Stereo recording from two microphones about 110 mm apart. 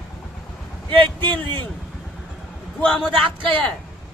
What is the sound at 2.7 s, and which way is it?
A man's voice, 10° left (ahead or behind).